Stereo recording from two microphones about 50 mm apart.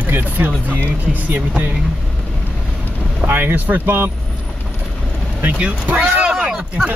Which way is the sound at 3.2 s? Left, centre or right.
Right.